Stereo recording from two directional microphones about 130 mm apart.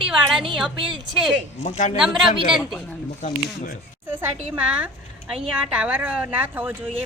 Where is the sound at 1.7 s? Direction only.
70° left (ahead or behind).